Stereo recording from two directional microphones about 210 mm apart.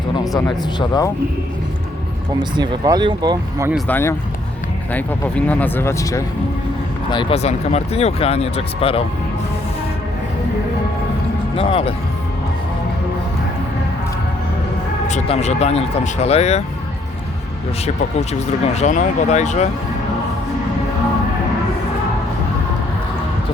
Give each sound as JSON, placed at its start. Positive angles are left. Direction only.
{"t": 0.8, "sound": "speech", "side_deg": 20}
{"t": 2.4, "sound": "speech", "side_deg": -20}
{"t": 3.8, "sound": "speech", "side_deg": 10}
{"t": 11.5, "sound": "speech", "side_deg": 25}
{"t": 15.0, "sound": "speech", "side_deg": 35}
{"t": 17.8, "sound": "speech", "side_deg": 30}